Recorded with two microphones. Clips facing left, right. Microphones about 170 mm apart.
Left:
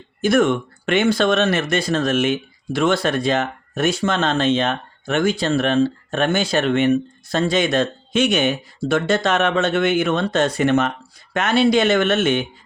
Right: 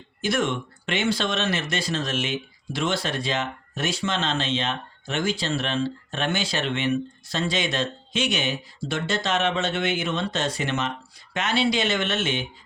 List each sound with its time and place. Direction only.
0.2 s speech: 50° left (ahead or behind)